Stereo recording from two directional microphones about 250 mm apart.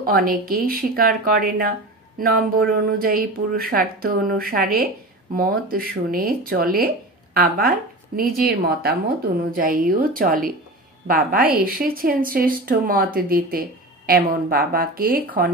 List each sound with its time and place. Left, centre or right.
0.0 s speech: right